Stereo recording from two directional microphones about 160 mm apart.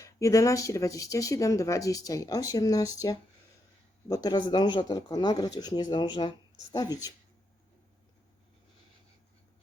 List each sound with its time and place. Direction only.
0.0 s speech: 20° left (ahead or behind)